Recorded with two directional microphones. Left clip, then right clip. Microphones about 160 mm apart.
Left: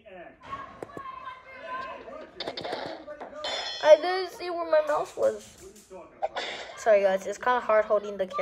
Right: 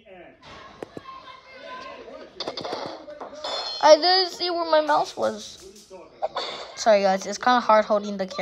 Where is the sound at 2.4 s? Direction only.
5° right (ahead or behind).